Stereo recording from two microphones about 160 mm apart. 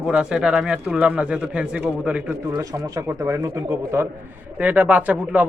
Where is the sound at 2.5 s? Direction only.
20° right (ahead or behind).